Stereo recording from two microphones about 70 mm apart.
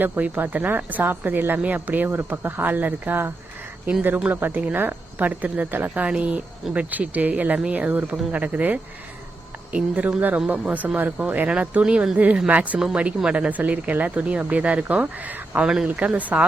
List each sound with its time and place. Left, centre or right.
0.0 s speech: right
15.6 s speech: centre
15.9 s speech: right